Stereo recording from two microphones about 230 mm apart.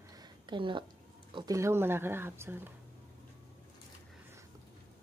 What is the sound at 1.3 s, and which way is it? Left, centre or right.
Speech, centre.